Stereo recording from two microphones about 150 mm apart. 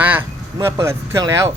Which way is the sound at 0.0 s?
15° right (ahead or behind).